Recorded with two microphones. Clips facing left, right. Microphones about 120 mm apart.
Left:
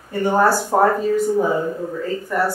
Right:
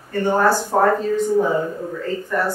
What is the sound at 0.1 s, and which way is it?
Speech, 10° left (ahead or behind).